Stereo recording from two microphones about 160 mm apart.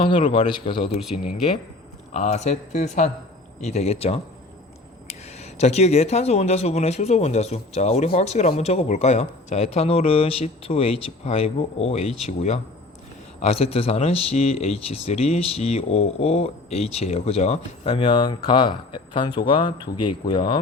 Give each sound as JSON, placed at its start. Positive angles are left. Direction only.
{"t": 0.0, "sound": "speech", "side_deg": 30}
{"t": 1.1, "sound": "speech", "side_deg": 45}